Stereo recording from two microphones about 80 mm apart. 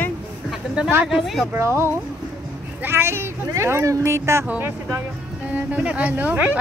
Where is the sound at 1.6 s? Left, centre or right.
Right.